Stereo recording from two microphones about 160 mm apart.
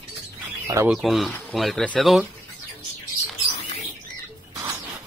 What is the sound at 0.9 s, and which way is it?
Speech, centre (ahead or behind).